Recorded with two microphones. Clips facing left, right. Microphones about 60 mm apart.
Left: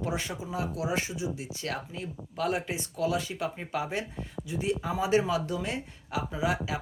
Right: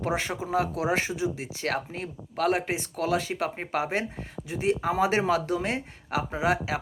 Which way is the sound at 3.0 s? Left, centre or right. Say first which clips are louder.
Right 2 dB; right.